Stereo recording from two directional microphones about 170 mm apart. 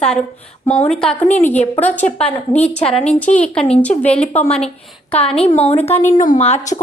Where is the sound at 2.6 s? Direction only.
10° left (ahead or behind).